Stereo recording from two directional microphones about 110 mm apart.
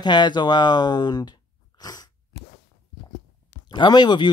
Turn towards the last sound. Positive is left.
turn(degrees=45)  # may be behind; listen again after turning